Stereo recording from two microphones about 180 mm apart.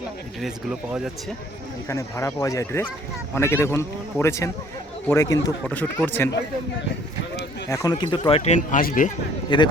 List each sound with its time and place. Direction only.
0.3 s speech: 5° right (ahead or behind)
1.9 s speech: 15° left (ahead or behind)
7.7 s speech: 20° left (ahead or behind)
8.4 s speech: 40° left (ahead or behind)
9.5 s speech: 25° left (ahead or behind)